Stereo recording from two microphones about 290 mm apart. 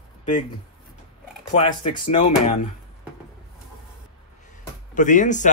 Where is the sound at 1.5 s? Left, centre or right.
Left.